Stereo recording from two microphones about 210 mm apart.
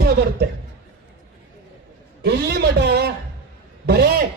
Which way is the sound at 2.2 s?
50° right (ahead or behind).